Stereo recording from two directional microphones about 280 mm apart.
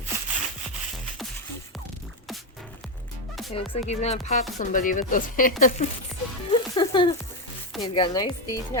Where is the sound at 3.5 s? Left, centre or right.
Left.